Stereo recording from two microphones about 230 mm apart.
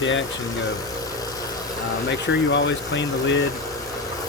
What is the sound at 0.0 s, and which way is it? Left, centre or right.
Speech, left.